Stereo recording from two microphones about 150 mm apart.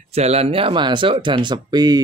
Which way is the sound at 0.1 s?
45° right (ahead or behind).